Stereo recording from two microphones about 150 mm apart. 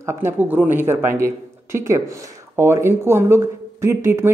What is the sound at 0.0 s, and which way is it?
Speech, 15° right (ahead or behind).